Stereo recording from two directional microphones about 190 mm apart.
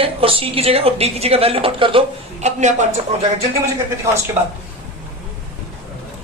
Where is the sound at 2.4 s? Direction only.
40° right (ahead or behind).